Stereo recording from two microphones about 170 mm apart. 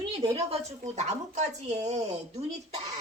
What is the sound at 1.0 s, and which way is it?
Speech, 40° right (ahead or behind).